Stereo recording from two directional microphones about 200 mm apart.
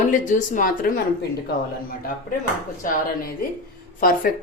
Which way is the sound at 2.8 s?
45° left (ahead or behind).